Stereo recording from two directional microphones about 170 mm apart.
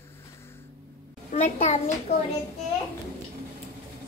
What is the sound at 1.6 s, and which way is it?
Speech, 40° left (ahead or behind).